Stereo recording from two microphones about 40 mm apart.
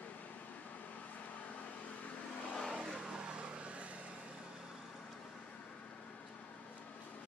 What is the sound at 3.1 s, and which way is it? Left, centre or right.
Vehicle, right.